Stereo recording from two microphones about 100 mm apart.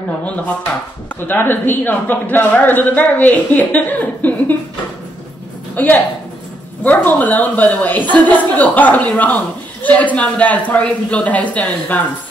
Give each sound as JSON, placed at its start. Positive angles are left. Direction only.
{"t": 1.2, "sound": "a man's voice", "side_deg": 20}
{"t": 5.8, "sound": "speech", "side_deg": 15}